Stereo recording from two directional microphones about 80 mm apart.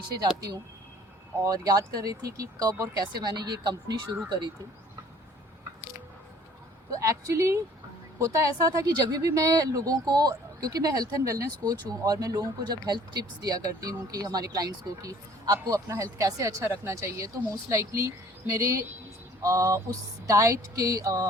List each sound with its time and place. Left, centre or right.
0.2 s speech: right
6.9 s speech: right